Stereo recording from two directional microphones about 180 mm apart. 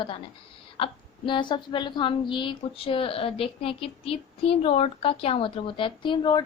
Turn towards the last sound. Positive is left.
turn(degrees=25)  # may be behind; listen again after turning